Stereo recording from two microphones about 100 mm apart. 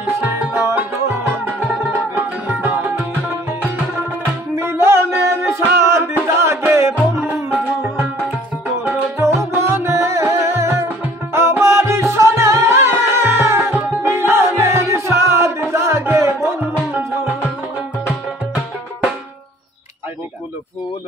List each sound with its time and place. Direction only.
0.0 s music: 20° right (ahead or behind)
4.6 s music: 25° right (ahead or behind)
9.4 s music: 25° right (ahead or behind)